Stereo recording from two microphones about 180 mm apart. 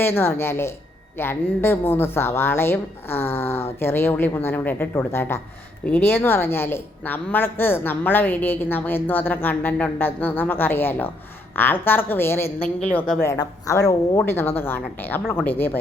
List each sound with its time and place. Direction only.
0.0 s a woman's voice: 10° left (ahead or behind)
13.2 s a woman's voice: 20° left (ahead or behind)